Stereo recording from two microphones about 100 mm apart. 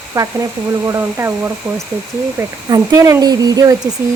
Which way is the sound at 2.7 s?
35° right (ahead or behind).